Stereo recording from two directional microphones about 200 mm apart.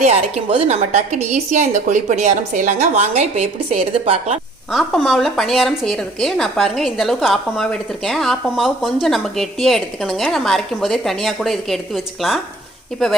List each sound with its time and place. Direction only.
0.0 s a woman's voice: 30° right (ahead or behind)
4.7 s a woman's voice: centre (ahead or behind)